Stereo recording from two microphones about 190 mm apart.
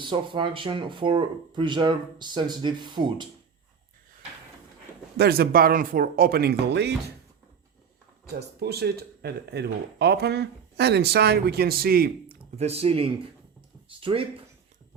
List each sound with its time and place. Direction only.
0.0 s speech: 25° right (ahead or behind)
5.1 s speech: 55° right (ahead or behind)
8.4 s speech: 55° right (ahead or behind)
12.5 s speech: 35° right (ahead or behind)